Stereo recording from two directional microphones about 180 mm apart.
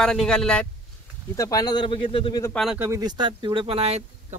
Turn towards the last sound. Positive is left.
turn(degrees=-35)  # may be behind; listen again after turning